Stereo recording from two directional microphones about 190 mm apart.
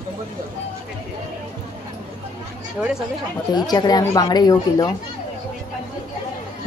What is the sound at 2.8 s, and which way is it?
Speech, 5° right (ahead or behind).